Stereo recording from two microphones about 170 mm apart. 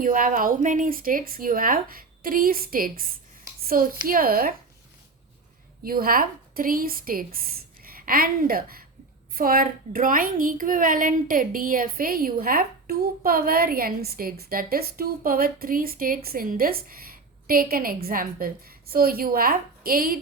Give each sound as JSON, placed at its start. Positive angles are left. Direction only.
{"t": 0.0, "sound": "a woman's voice", "side_deg": -55}
{"t": 5.8, "sound": "a woman's voice", "side_deg": -60}